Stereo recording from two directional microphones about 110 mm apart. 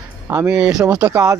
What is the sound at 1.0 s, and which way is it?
Speech, 20° right (ahead or behind).